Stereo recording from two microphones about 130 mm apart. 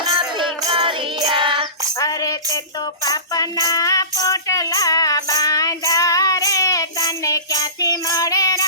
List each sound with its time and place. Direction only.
0.3 s music: 40° right (ahead or behind)
2.0 s music: 25° left (ahead or behind)